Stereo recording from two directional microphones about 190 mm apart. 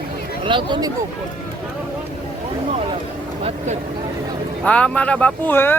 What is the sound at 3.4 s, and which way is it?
Speech, 30° right (ahead or behind).